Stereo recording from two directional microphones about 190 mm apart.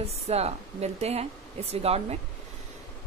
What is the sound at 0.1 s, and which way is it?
A woman's voice, 35° right (ahead or behind).